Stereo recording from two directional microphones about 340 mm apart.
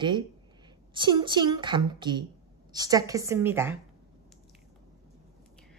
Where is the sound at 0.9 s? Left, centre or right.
Centre.